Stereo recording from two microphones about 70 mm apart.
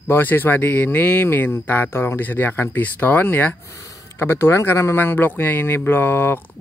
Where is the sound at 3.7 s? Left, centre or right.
Left.